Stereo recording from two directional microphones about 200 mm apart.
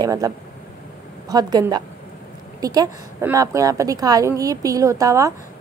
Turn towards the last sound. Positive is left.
turn(degrees=-15)  # may be behind; listen again after turning